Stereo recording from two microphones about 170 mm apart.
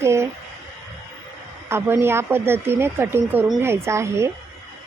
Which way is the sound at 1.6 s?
15° right (ahead or behind).